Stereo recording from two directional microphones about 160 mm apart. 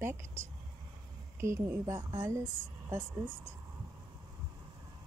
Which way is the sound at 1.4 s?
15° right (ahead or behind).